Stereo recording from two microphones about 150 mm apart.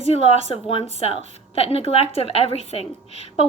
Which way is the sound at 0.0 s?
40° left (ahead or behind).